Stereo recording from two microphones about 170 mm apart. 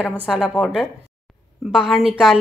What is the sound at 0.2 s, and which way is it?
A woman's voice, 5° right (ahead or behind).